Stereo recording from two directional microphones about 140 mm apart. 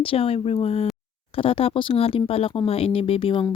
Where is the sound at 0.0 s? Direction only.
40° left (ahead or behind).